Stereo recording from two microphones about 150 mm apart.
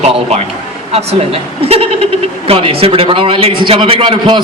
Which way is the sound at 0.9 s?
40° right (ahead or behind).